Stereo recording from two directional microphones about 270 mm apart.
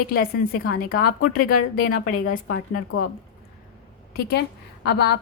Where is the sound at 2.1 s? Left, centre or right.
Left.